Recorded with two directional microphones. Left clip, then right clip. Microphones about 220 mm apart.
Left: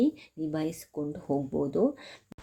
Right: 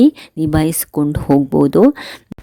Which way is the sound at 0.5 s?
50° right (ahead or behind).